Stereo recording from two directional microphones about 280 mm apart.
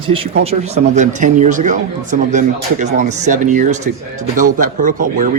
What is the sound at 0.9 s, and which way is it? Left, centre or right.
Speech, right.